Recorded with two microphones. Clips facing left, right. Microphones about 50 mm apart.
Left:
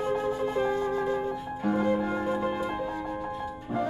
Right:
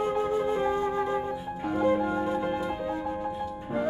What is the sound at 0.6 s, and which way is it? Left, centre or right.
Wind instrument, centre.